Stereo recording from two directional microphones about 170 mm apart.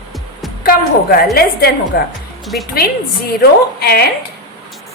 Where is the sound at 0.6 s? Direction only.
60° left (ahead or behind).